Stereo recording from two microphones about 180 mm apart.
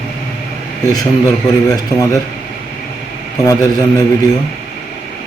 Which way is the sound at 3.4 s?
20° left (ahead or behind).